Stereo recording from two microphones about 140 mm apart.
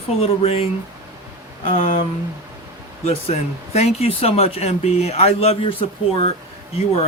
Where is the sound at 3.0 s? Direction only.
50° left (ahead or behind).